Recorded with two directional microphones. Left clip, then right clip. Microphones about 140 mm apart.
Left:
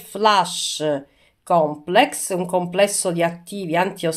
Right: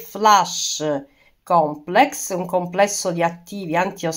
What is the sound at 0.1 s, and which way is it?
Speech, 5° left (ahead or behind).